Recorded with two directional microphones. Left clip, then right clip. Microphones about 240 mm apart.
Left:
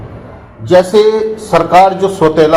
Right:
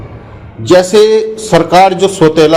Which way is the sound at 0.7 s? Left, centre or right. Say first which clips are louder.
Right 2 dB; right.